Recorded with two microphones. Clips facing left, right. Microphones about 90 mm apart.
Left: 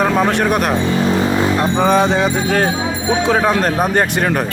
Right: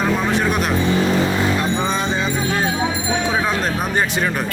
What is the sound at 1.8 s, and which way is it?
Speech, 65° left (ahead or behind).